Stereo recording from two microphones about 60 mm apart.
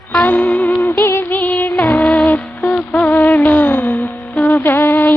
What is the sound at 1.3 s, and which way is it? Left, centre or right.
Music, left.